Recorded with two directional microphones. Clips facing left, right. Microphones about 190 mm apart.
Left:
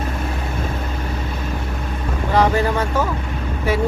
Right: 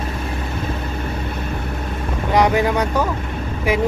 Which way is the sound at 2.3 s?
15° right (ahead or behind).